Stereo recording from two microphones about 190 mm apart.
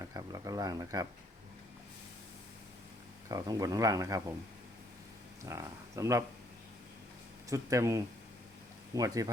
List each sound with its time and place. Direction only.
0.0 s speech: 20° right (ahead or behind)
3.2 s speech: 20° right (ahead or behind)
5.5 s speech: 15° right (ahead or behind)
7.5 s speech: 15° right (ahead or behind)